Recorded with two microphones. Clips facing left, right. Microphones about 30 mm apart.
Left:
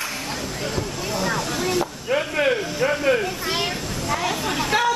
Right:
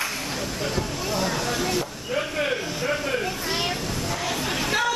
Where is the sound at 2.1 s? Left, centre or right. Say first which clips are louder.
Left 5 dB; centre.